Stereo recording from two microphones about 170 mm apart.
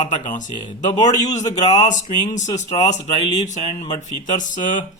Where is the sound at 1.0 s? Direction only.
45° left (ahead or behind).